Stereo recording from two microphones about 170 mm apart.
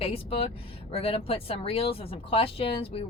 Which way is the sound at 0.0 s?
35° left (ahead or behind).